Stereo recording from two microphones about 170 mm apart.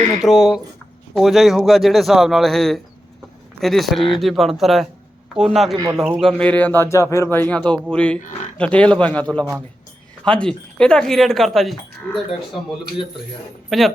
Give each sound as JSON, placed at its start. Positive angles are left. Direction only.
{"t": 0.2, "sound": "speech", "side_deg": 0}
{"t": 13.7, "sound": "speech", "side_deg": 0}